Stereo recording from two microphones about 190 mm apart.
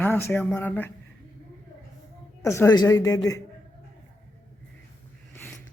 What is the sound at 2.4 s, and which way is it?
Speech, 15° left (ahead or behind).